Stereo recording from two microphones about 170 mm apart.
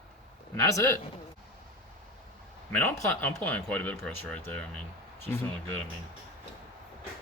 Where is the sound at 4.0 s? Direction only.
5° left (ahead or behind).